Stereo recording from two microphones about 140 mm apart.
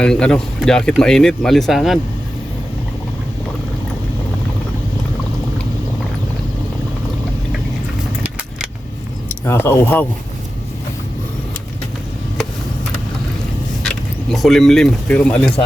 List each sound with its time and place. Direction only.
0.0 s speech: 5° left (ahead or behind)
8.2 s vehicle: 5° right (ahead or behind)
9.3 s speech: 15° left (ahead or behind)
13.8 s speech: centre (ahead or behind)